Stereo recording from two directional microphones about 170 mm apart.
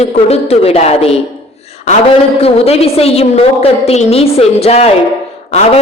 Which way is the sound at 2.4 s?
35° left (ahead or behind).